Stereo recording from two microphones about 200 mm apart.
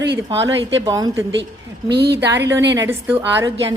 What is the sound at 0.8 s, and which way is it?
Speech, 20° right (ahead or behind).